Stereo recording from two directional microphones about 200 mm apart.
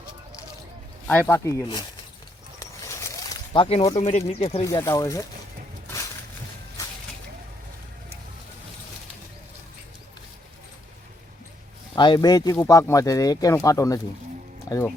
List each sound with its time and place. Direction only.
1.0 s speech: 10° left (ahead or behind)
2.6 s a sound: 15° left (ahead or behind)
3.8 s speech: 30° left (ahead or behind)
4.7 s speech: 15° left (ahead or behind)
11.9 s speech: 20° left (ahead or behind)